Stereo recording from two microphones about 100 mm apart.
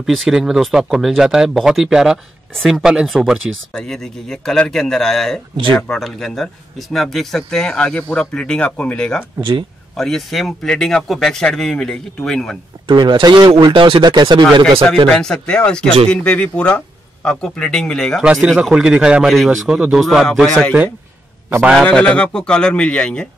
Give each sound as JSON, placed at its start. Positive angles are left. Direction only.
{"t": 0.0, "sound": "speech", "side_deg": -5}
{"t": 9.4, "sound": "speech", "side_deg": -60}
{"t": 9.9, "sound": "speech", "side_deg": 5}
{"t": 12.8, "sound": "speech", "side_deg": -50}
{"t": 15.0, "sound": "speech", "side_deg": 5}
{"t": 18.2, "sound": "a man's voice", "side_deg": -10}
{"t": 21.7, "sound": "speech", "side_deg": 10}